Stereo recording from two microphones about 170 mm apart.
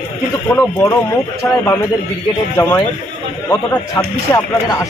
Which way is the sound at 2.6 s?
15° left (ahead or behind).